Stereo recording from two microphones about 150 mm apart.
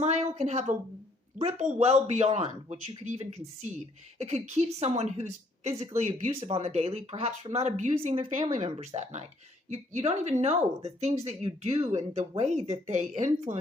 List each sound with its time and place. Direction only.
0.0 s a woman's voice: 50° right (ahead or behind); by 8.5 s 35° right (ahead or behind)
8.8 s speech: 50° right (ahead or behind)